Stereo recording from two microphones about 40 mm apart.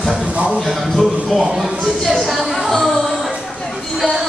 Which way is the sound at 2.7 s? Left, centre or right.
Centre.